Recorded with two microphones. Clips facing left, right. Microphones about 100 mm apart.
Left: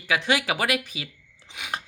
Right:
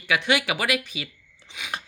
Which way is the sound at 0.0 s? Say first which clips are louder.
Right 1 dB; 35° left (ahead or behind).